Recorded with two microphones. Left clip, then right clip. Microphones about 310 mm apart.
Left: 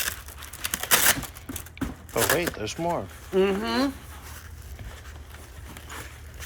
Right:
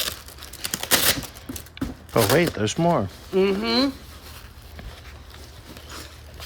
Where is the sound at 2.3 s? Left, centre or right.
Right.